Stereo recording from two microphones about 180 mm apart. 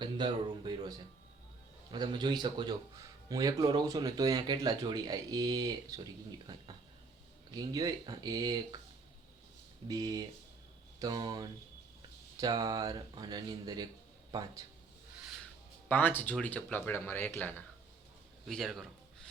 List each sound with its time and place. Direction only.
0.0 s a man's voice: 25° right (ahead or behind)
9.9 s a man's voice: 20° right (ahead or behind)
15.9 s a man's voice: 10° left (ahead or behind)